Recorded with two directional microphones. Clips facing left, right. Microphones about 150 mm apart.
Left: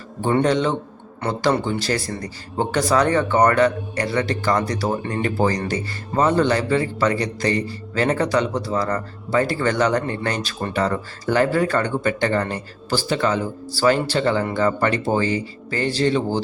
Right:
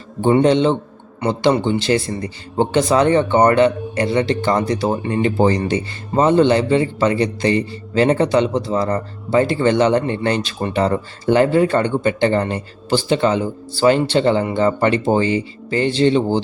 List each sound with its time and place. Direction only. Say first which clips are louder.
0.2 s speech: right 5 dB; 25° right (ahead or behind)